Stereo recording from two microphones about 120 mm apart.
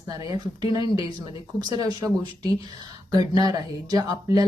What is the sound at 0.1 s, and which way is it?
Speech, 35° right (ahead or behind).